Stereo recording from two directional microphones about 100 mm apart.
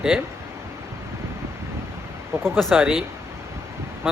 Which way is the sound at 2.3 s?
25° right (ahead or behind).